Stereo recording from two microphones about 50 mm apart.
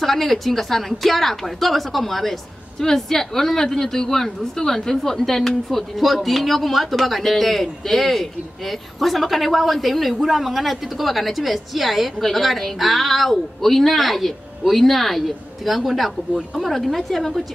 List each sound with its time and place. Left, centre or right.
0.0 s a woman's voice: centre